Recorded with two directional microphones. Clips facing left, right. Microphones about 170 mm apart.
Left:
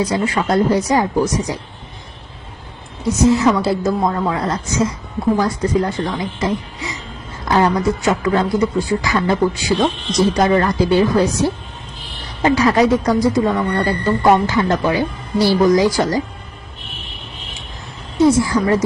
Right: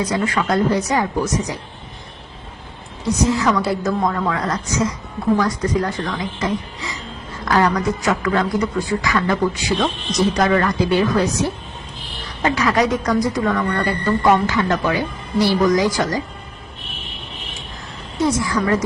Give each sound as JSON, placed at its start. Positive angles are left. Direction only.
{"t": 0.0, "sound": "speech", "side_deg": 30}
{"t": 3.1, "sound": "speech", "side_deg": 20}
{"t": 12.4, "sound": "speech", "side_deg": 30}
{"t": 18.2, "sound": "speech", "side_deg": 25}